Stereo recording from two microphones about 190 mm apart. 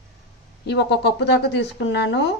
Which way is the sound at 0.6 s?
60° left (ahead or behind).